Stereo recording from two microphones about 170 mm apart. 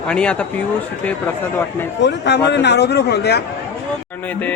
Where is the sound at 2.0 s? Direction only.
90° left.